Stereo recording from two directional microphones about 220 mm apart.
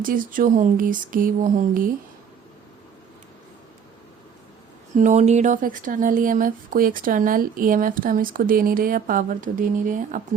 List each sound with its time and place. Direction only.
0.0 s speech: 40° right (ahead or behind)
4.9 s speech: 30° right (ahead or behind)